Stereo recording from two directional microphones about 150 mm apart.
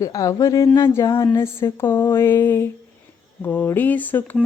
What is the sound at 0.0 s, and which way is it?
A woman's voice, 25° left (ahead or behind).